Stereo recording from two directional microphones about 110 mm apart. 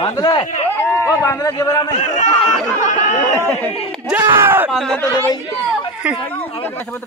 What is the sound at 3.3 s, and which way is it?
Speech, 20° left (ahead or behind).